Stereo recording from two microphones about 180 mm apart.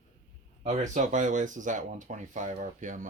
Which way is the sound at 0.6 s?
40° right (ahead or behind).